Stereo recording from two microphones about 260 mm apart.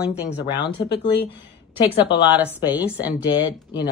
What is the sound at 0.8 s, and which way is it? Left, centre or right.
Speech, left.